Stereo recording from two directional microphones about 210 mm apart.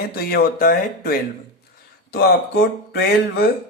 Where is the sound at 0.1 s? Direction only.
45° left (ahead or behind).